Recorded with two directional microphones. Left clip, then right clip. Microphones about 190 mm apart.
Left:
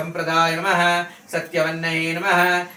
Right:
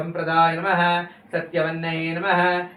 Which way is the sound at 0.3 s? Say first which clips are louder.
Even; 35° left (ahead or behind).